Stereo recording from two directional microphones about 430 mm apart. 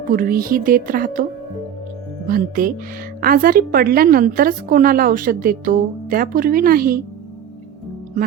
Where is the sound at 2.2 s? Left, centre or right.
Centre.